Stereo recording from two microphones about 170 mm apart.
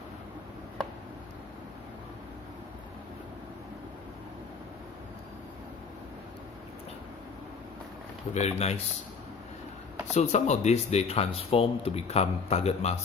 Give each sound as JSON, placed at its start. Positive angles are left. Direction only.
{"t": 8.3, "sound": "speech", "side_deg": 40}
{"t": 10.2, "sound": "speech", "side_deg": 45}